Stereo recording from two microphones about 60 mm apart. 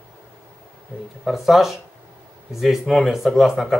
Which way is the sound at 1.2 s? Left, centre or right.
Centre.